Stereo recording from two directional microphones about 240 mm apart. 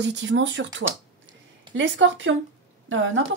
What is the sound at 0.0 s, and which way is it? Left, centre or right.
Speech, right.